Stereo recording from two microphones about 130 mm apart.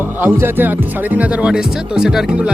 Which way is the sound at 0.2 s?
15° right (ahead or behind).